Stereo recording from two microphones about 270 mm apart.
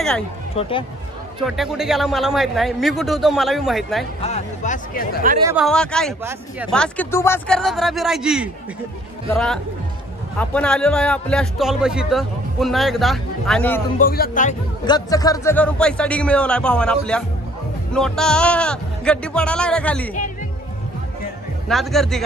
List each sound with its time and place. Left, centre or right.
0.6 s speech: centre
1.4 s a man's voice: centre
4.2 s speech: left
5.4 s speech: centre
5.7 s a man's voice: centre
13.9 s speech: left
14.9 s a man's voice: centre
21.6 s a man's voice: centre